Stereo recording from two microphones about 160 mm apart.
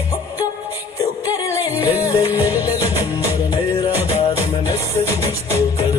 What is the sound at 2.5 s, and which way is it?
Music, 15° right (ahead or behind).